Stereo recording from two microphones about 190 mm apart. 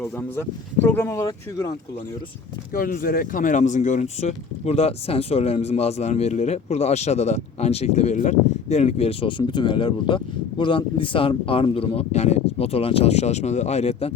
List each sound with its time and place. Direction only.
0.0 s speech: 10° left (ahead or behind)
2.7 s speech: 50° left (ahead or behind)